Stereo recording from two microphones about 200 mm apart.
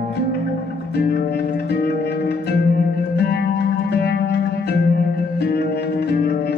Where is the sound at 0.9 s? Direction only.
50° left (ahead or behind).